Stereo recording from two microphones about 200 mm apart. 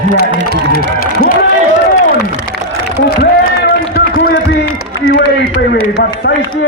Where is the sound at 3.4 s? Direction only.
50° left (ahead or behind).